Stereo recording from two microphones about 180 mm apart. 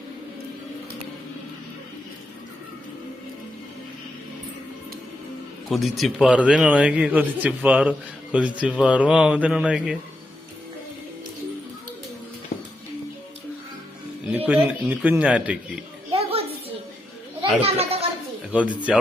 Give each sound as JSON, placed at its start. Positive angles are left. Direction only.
{"t": 5.6, "sound": "a man's voice", "side_deg": 0}
{"t": 14.3, "sound": "a man's voice", "side_deg": -10}
{"t": 16.1, "sound": "a sound", "side_deg": -30}
{"t": 17.6, "sound": "a child's voice", "side_deg": -35}
{"t": 18.5, "sound": "a man's voice", "side_deg": -10}